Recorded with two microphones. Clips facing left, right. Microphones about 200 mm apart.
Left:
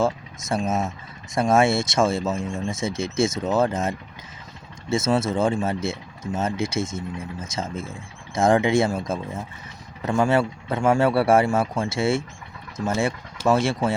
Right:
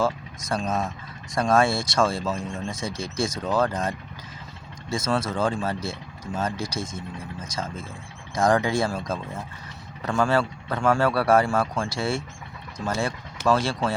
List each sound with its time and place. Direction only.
0.0 s speech: 25° left (ahead or behind)